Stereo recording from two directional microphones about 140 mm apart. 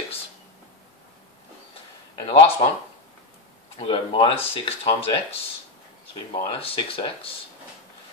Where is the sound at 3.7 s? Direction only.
40° left (ahead or behind).